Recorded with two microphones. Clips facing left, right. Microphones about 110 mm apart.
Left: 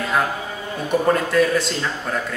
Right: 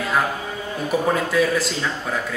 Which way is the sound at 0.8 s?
Centre (ahead or behind).